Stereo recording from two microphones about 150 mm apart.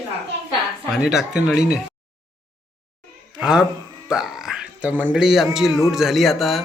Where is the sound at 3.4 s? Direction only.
5° right (ahead or behind).